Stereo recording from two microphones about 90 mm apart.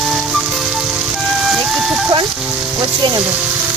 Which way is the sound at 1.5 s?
5° right (ahead or behind).